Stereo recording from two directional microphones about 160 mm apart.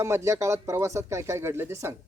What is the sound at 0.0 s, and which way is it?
Speech, 15° right (ahead or behind).